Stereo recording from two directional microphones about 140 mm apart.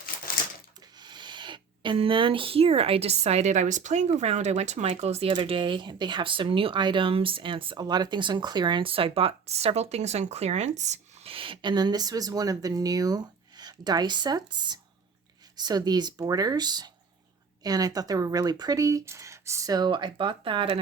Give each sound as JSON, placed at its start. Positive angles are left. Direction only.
{"t": 0.9, "sound": "speech", "side_deg": -30}